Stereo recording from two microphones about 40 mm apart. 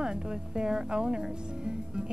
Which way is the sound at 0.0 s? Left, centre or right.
Centre.